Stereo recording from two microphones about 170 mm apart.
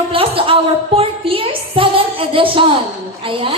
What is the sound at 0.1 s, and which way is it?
A woman's voice, 30° right (ahead or behind).